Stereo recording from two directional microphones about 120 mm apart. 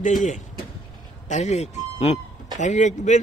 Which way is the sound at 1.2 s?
75° left (ahead or behind).